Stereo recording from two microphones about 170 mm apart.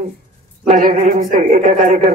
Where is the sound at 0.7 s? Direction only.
50° right (ahead or behind).